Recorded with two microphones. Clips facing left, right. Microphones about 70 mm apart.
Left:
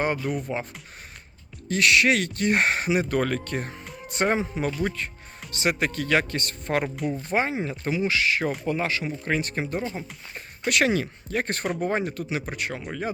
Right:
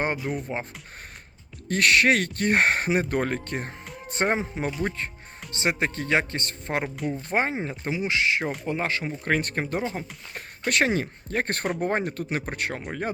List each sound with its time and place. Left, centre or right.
0.2 s speech: right
1.6 s speech: right
3.2 s speech: right
6.9 s speech: centre
7.3 s speech: right
9.2 s speech: right
10.7 s speech: right
11.3 s speech: right